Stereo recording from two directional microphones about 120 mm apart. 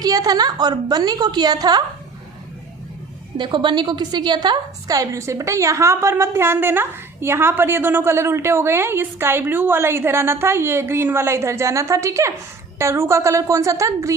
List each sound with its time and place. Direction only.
0.0 s a woman's voice: 30° right (ahead or behind)
3.3 s a woman's voice: 40° right (ahead or behind)